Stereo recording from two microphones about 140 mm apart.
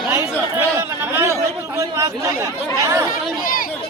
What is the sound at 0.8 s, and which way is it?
Chatter, 20° right (ahead or behind).